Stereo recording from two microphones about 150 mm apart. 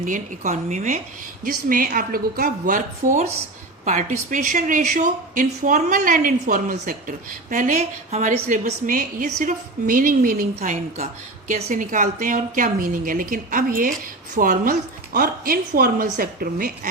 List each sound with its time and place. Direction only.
0.0 s a woman's voice: 60° right (ahead or behind)
1.5 s a woman's voice: 70° right (ahead or behind)